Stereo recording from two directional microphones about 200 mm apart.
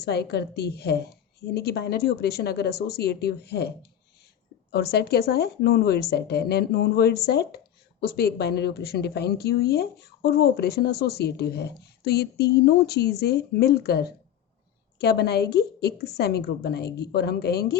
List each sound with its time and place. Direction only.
0.0 s a woman's voice: 55° left (ahead or behind)
4.7 s a woman's voice: 55° left (ahead or behind)